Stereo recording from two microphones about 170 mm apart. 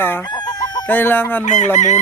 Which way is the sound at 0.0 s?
10° left (ahead or behind).